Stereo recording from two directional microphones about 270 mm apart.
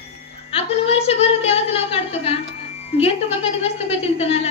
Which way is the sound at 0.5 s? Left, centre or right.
Left.